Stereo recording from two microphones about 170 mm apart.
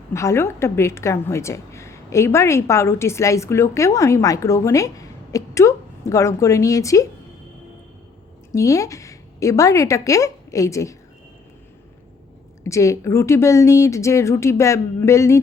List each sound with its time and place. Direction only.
0.1 s a woman's voice: 15° left (ahead or behind)
8.5 s a woman's voice: 20° left (ahead or behind)
12.6 s a woman's voice: 20° left (ahead or behind)